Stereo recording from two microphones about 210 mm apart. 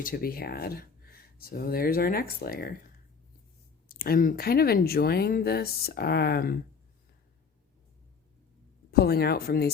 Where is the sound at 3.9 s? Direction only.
45° left (ahead or behind).